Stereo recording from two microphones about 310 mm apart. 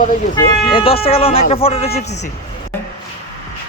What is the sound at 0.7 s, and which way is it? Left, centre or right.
Speech, centre.